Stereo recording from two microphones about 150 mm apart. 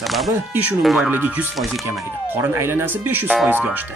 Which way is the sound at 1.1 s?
10° right (ahead or behind).